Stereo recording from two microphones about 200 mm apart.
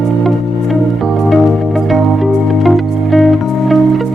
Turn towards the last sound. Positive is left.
turn(degrees=0)  # may be behind; listen again after turning